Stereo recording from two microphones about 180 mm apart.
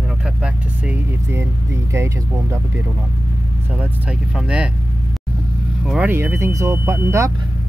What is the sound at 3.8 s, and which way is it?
Speech, 5° right (ahead or behind).